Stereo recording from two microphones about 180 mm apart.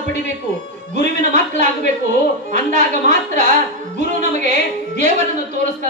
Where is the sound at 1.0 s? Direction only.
40° right (ahead or behind).